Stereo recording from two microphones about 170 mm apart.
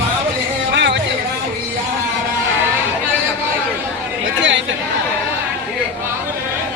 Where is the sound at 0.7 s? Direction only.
90° right.